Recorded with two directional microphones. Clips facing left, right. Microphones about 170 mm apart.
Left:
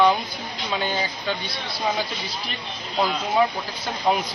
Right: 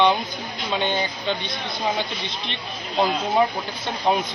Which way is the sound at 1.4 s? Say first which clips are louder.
Right 2 dB; 20° right (ahead or behind).